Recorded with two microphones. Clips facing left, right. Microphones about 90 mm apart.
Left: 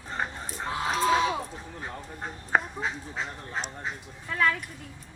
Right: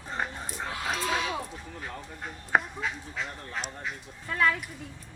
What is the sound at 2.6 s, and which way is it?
Speech, 30° left (ahead or behind).